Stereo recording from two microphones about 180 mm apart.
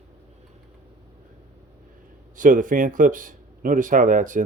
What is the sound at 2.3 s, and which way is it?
Speech, 45° right (ahead or behind).